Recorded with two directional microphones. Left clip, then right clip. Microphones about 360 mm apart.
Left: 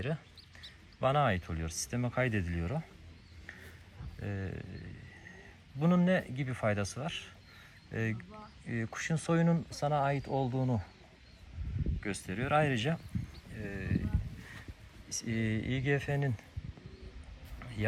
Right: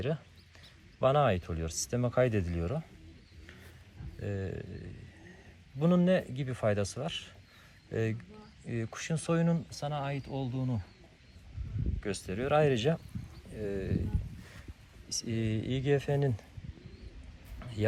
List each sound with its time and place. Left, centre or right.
1.0 s speech: centre
4.2 s speech: centre
5.8 s speech: centre
11.9 s speech: centre
15.1 s speech: centre